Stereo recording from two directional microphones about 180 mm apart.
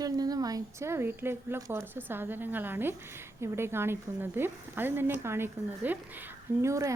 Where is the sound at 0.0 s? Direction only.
20° right (ahead or behind).